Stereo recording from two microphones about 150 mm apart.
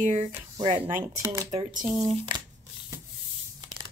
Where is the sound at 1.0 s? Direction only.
20° right (ahead or behind).